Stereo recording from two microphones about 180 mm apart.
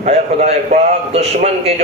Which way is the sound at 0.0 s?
40° right (ahead or behind).